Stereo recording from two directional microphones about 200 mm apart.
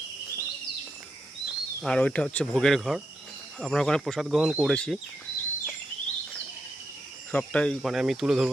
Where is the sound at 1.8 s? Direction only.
5° left (ahead or behind).